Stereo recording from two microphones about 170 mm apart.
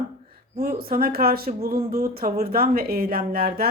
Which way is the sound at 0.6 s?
60° right (ahead or behind).